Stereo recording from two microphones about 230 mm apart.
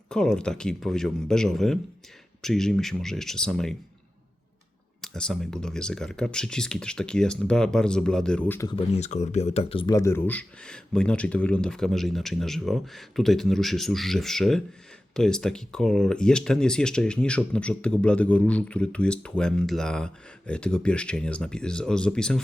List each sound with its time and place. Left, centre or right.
0.1 s speech: centre
4.9 s speech: centre
8.7 s speech: left; by 22.4 s centre